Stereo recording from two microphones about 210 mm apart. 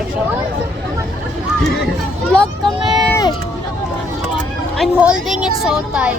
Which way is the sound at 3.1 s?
20° left (ahead or behind).